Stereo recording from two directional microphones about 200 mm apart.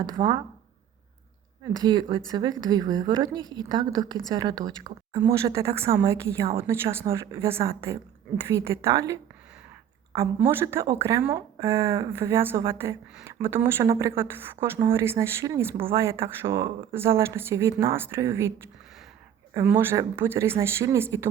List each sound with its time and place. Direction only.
0.0 s speech: 20° right (ahead or behind)
1.7 s speech: 20° right (ahead or behind)
19.5 s speech: 10° right (ahead or behind)